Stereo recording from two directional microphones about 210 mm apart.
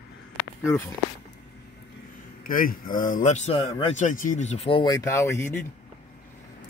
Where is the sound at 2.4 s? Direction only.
40° left (ahead or behind).